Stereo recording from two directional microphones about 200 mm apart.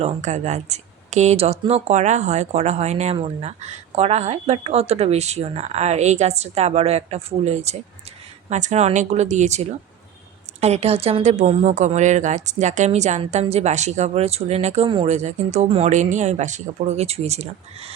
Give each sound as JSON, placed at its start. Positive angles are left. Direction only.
{"t": 0.0, "sound": "speech", "side_deg": -35}